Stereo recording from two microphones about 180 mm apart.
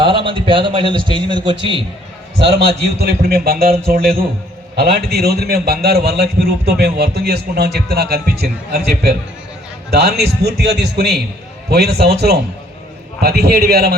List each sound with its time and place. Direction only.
0.0 s a man's voice: 30° right (ahead or behind)
2.4 s a man's voice: 60° right (ahead or behind)
13.1 s a man's voice: 60° right (ahead or behind)